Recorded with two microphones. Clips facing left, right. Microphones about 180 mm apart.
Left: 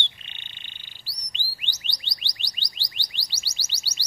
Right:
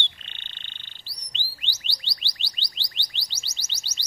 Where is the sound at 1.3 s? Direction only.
15° left (ahead or behind).